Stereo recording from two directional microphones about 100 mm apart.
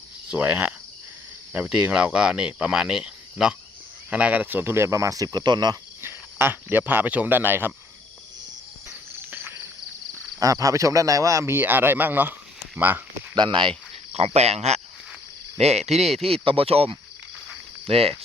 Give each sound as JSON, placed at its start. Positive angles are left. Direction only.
{"t": 0.3, "sound": "speech", "side_deg": -15}
{"t": 6.0, "sound": "speech", "side_deg": -25}
{"t": 10.4, "sound": "speech", "side_deg": -35}
{"t": 13.3, "sound": "speech", "side_deg": -50}
{"t": 14.1, "sound": "speech", "side_deg": -90}
{"t": 16.2, "sound": "speech", "side_deg": -70}